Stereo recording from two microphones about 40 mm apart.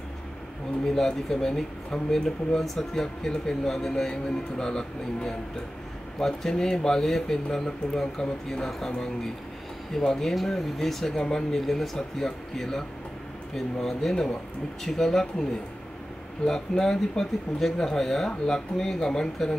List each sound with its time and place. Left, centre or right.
0.8 s speech: centre
10.0 s speech: centre
11.5 s speech: centre
16.4 s speech: centre